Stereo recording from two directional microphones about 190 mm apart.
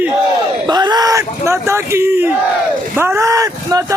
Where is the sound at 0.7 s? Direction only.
20° right (ahead or behind).